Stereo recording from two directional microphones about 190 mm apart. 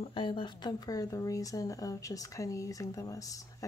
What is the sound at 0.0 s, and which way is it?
Speech, 25° left (ahead or behind).